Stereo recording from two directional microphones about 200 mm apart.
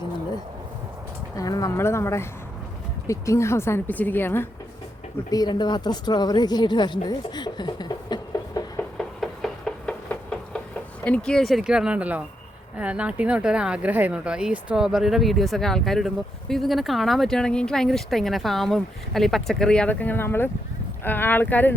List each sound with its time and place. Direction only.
1.4 s a woman's voice: 15° left (ahead or behind)
5.3 s speech: 20° left (ahead or behind)
9.0 s knock: centre (ahead or behind)
11.0 s a woman's voice: 5° left (ahead or behind)